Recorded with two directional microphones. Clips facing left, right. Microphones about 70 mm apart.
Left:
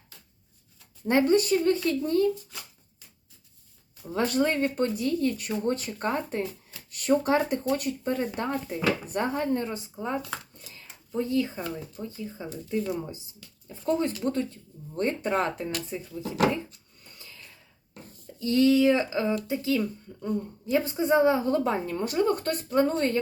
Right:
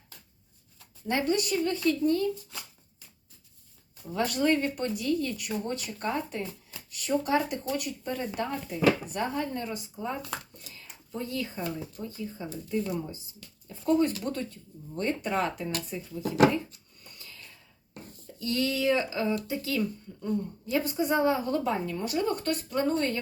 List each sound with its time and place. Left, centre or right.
1.0 s speech: left
4.1 s a woman's voice: left
13.9 s a woman's voice: left
18.3 s a woman's voice: left